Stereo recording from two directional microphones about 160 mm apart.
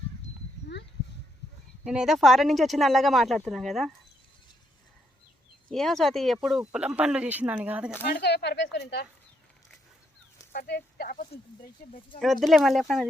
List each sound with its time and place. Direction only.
1.8 s speech: 5° right (ahead or behind)
5.7 s speech: centre (ahead or behind)
8.1 s speech: 90° left
10.5 s speech: 80° left
12.2 s speech: centre (ahead or behind)